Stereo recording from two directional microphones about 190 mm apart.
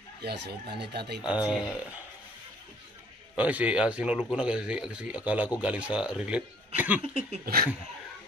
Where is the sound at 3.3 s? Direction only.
5° right (ahead or behind).